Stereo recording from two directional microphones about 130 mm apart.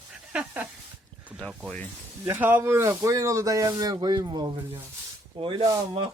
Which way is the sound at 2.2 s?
15° right (ahead or behind).